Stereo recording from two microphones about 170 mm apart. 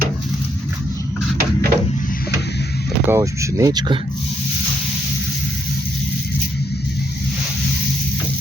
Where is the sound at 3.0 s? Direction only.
15° right (ahead or behind).